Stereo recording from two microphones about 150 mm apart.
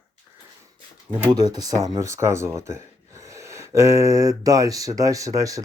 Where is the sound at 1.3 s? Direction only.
25° right (ahead or behind).